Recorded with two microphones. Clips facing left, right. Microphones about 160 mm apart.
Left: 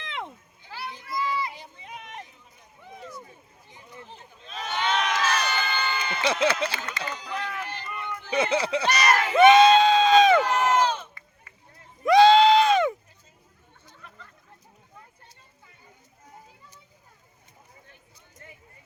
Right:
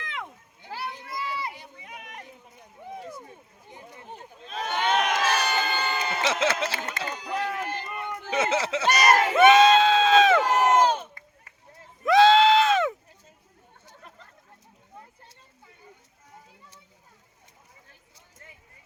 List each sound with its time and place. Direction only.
0.0 s a sound: 25° left (ahead or behind)
0.6 s children playing: 55° right (ahead or behind)
1.8 s run: 25° left (ahead or behind)
3.7 s crowd: 55° right (ahead or behind)
6.2 s speech: centre (ahead or behind)
6.8 s run: 50° right (ahead or behind)
8.3 s speech: 5° right (ahead or behind)
8.9 s speech: 45° right (ahead or behind)
9.3 s crowd: centre (ahead or behind)
10.4 s crowd: 40° right (ahead or behind)
12.0 s goat: centre (ahead or behind)
13.9 s a sound: 35° right (ahead or behind)